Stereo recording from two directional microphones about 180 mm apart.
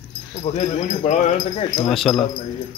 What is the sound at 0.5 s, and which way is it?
Speech, 40° left (ahead or behind).